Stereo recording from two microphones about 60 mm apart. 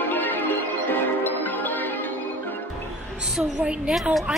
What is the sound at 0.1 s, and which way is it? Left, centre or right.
Music, left.